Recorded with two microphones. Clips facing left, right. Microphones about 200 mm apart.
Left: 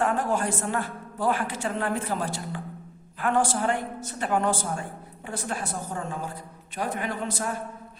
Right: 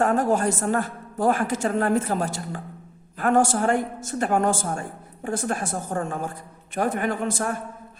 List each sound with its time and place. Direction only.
0.0 s a woman's voice: 45° right (ahead or behind)